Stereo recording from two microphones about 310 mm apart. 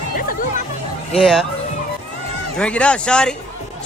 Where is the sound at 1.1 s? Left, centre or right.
Centre.